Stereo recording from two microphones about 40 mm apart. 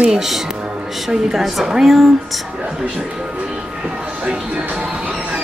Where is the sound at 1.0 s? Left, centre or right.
Centre.